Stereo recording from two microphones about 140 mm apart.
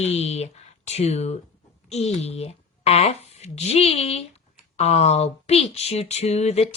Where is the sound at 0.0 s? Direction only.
50° left (ahead or behind).